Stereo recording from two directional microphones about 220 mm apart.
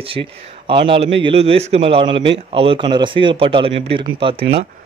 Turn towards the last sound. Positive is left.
turn(degrees=-25)  # may be behind; listen again after turning